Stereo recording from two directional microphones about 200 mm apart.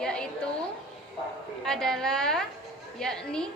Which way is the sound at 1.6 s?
Centre (ahead or behind).